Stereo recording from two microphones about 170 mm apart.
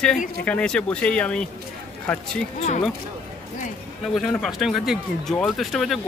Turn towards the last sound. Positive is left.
turn(degrees=0)  # may be behind; listen again after turning